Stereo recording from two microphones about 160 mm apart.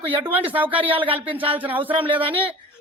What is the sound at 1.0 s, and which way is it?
Speech, 35° right (ahead or behind).